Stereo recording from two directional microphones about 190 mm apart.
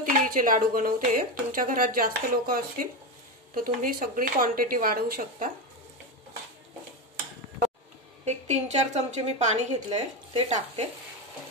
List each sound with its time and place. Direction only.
0.0 s speech: 45° right (ahead or behind)
8.3 s a woman's voice: 35° right (ahead or behind)